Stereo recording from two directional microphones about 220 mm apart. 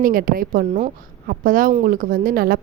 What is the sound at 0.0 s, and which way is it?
A woman's voice, 40° right (ahead or behind).